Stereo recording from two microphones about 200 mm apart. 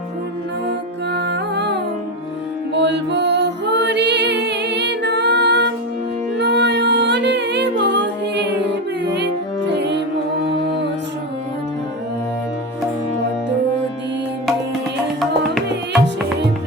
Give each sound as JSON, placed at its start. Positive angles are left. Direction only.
{"t": 1.1, "sound": "music", "side_deg": -60}